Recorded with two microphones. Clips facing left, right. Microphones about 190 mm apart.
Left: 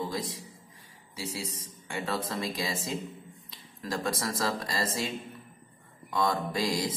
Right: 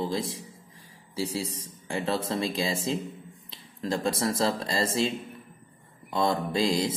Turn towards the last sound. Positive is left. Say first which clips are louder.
# right 4 dB
turn(degrees=-25)  # may be behind; listen again after turning